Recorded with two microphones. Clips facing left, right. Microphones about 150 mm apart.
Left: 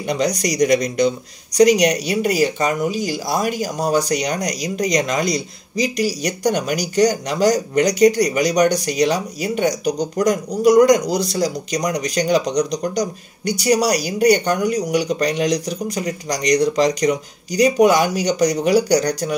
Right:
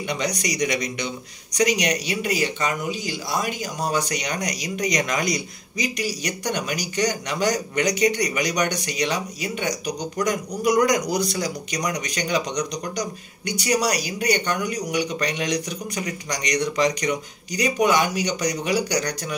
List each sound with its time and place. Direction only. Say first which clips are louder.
0.0 s speech: left 6 dB; 40° left (ahead or behind)